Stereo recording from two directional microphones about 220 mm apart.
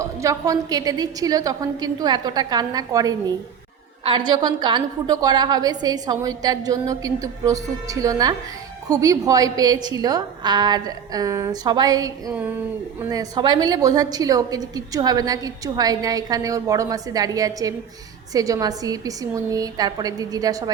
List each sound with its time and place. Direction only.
0.0 s a woman's voice: 15° right (ahead or behind)